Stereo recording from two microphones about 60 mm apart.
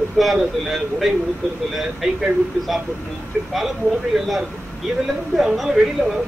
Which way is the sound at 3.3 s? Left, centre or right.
Right.